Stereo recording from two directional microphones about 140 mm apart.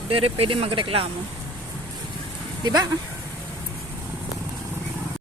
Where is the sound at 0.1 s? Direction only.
40° right (ahead or behind).